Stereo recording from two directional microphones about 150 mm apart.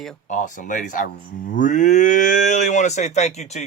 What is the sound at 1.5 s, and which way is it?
Cattle, 55° left (ahead or behind).